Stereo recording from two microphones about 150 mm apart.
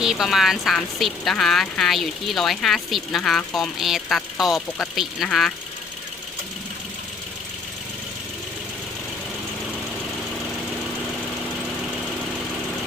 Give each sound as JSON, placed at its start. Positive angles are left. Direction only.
{"t": 0.0, "sound": "a woman's voice", "side_deg": -5}